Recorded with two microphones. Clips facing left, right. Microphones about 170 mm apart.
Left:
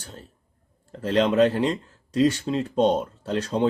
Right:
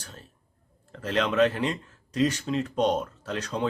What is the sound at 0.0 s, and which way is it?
Speech, 30° left (ahead or behind).